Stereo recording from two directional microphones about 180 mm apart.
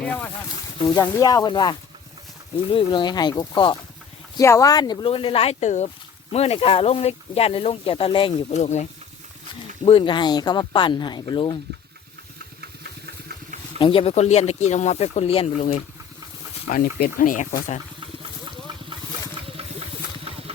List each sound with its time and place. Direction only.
0.9 s speech: 20° left (ahead or behind)
2.7 s speech: 25° left (ahead or behind)
9.8 s speech: 30° left (ahead or behind)
12.8 s engine: 65° right (ahead or behind)
13.7 s speech: 30° left (ahead or behind)
16.6 s speech: 50° left (ahead or behind)